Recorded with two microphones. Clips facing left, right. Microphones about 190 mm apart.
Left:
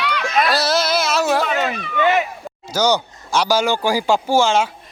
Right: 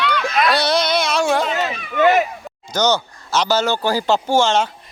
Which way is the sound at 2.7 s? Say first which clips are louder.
Even; 10° left (ahead or behind).